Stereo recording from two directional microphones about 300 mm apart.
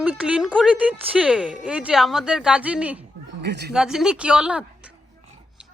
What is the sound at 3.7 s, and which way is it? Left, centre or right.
Speech, centre.